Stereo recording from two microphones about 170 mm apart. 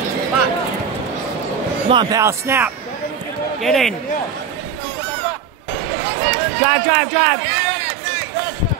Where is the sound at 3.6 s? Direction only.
Centre (ahead or behind).